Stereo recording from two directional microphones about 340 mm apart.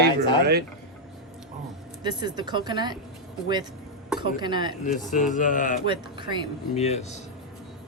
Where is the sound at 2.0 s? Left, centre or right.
Centre.